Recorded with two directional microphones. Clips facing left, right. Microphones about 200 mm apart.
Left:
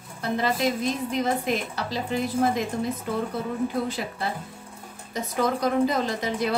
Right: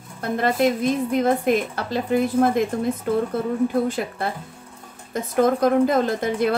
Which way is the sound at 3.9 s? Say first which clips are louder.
Right 4 dB; 55° right (ahead or behind).